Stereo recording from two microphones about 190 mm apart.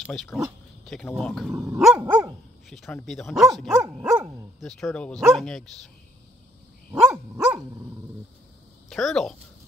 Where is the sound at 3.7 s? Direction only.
10° right (ahead or behind).